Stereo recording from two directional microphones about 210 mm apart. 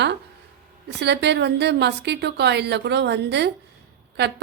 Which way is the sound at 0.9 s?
55° right (ahead or behind).